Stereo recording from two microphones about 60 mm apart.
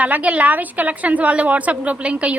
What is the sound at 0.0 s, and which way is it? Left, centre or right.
A woman's voice, right.